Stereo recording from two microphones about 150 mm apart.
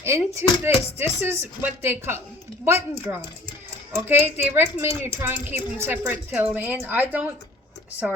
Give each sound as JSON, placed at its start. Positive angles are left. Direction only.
{"t": 0.0, "sound": "speech", "side_deg": -20}